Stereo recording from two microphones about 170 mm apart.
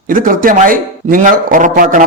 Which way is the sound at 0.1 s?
55° right (ahead or behind).